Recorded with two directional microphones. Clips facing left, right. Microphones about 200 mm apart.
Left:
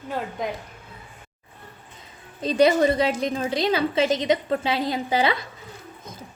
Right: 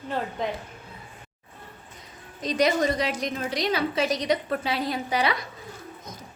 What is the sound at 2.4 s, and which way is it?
A woman's voice, 30° left (ahead or behind).